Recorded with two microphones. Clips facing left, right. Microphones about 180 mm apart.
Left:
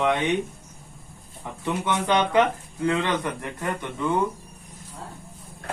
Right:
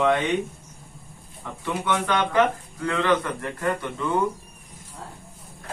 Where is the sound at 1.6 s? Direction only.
20° left (ahead or behind).